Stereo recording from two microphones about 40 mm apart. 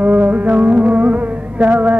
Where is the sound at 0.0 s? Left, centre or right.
Right.